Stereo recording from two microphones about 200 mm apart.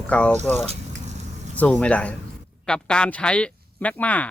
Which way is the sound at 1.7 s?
5° left (ahead or behind).